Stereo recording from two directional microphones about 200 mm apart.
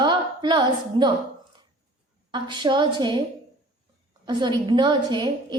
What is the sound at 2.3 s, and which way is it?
Speech, 20° right (ahead or behind).